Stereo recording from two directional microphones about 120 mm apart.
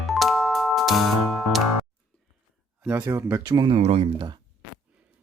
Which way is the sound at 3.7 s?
60° right (ahead or behind).